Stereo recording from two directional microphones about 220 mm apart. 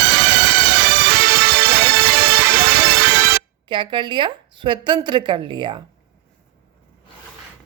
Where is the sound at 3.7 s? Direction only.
20° right (ahead or behind).